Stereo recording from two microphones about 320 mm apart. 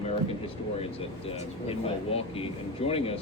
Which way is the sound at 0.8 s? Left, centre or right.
Centre.